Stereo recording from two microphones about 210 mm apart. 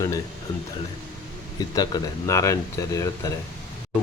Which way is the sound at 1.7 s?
20° left (ahead or behind).